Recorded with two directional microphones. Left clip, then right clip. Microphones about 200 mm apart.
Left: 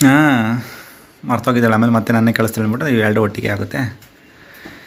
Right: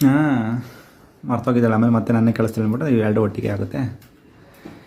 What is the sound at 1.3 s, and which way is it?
Speech, 5° left (ahead or behind).